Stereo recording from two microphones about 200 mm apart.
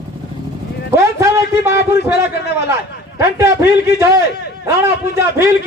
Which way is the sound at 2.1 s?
55° left (ahead or behind).